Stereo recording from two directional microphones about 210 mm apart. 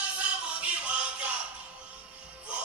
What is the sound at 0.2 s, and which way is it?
Music, 5° right (ahead or behind).